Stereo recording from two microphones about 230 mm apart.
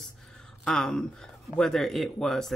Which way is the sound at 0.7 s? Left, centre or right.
Centre.